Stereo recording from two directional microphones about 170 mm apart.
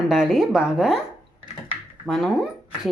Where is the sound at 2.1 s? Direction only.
Centre (ahead or behind).